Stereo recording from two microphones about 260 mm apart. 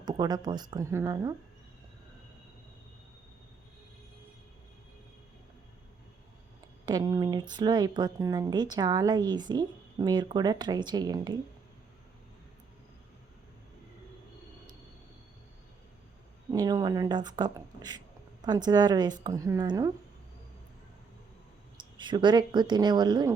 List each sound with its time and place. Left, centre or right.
0.0 s speech: centre
6.8 s speech: centre
16.5 s speech: centre
21.8 s speech: centre